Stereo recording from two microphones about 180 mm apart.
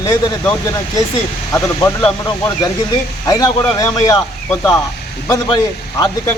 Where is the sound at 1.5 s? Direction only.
15° left (ahead or behind).